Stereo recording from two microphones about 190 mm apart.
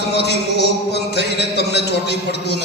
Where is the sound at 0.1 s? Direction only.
60° left (ahead or behind).